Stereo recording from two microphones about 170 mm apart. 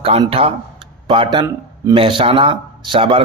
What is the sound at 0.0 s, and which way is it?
Speech, 35° right (ahead or behind).